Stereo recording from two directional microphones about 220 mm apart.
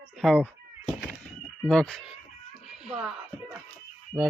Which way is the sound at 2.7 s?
5° right (ahead or behind).